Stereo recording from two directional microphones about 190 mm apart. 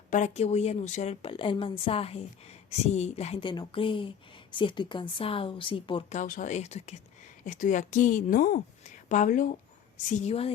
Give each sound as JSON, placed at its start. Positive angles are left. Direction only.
{"t": 0.1, "sound": "a woman's voice", "side_deg": 35}
{"t": 6.1, "sound": "a woman's voice", "side_deg": 40}